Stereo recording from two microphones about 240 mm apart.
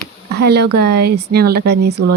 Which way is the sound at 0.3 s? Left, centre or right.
Right.